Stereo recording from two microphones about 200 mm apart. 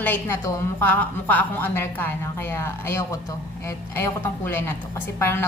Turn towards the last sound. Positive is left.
turn(degrees=10)  # may be behind; listen again after turning